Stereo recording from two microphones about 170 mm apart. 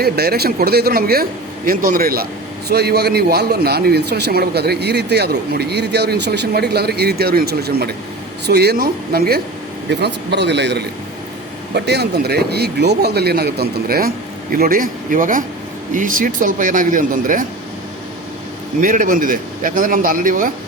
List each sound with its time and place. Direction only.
0.0 s speech: 65° right (ahead or behind)
2.6 s a man's voice: 70° right (ahead or behind)
9.9 s a man's voice: 85° right
11.7 s a man's voice: 70° right (ahead or behind); by 17.4 s 50° right (ahead or behind)
18.8 s a man's voice: 55° right (ahead or behind)